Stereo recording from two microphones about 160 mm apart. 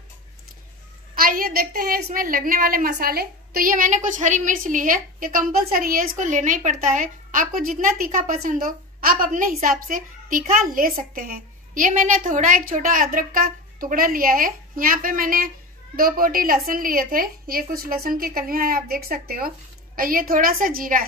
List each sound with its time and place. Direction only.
1.1 s a woman's voice: 65° right (ahead or behind)